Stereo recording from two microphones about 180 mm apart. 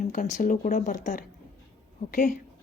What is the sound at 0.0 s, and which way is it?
Speech, 45° left (ahead or behind).